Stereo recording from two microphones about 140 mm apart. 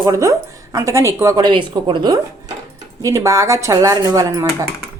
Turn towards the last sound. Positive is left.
turn(degrees=-25)  # may be behind; listen again after turning